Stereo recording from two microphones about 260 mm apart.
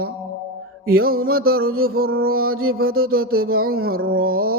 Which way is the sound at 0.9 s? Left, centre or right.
Right.